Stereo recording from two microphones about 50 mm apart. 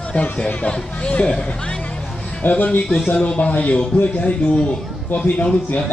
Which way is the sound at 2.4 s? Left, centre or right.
Left.